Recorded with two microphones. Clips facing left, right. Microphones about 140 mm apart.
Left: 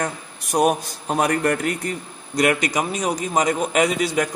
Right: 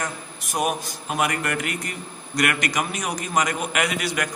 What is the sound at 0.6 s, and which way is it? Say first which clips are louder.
A man's voice: left 6 dB; 35° left (ahead or behind).